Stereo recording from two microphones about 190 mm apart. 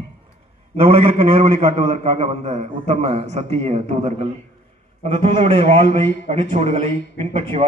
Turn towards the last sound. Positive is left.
turn(degrees=-30)  # may be behind; listen again after turning